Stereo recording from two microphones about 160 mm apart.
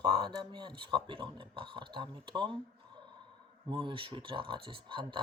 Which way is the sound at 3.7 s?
30° right (ahead or behind).